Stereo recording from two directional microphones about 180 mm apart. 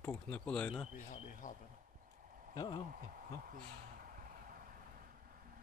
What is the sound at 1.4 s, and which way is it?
Speech, 45° left (ahead or behind).